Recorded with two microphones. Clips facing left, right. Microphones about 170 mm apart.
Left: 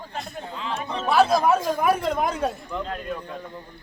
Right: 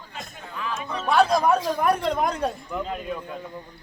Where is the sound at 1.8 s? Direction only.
Centre (ahead or behind).